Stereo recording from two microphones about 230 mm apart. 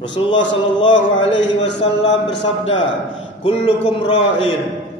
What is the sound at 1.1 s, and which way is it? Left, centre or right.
Speech, left.